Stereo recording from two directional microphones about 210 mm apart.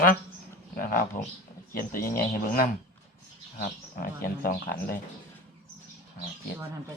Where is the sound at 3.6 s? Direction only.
40° left (ahead or behind).